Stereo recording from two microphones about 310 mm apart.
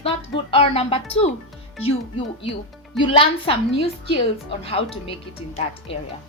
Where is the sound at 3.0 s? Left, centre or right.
Centre.